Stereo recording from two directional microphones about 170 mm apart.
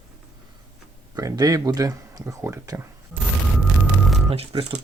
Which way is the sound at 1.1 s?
20° right (ahead or behind).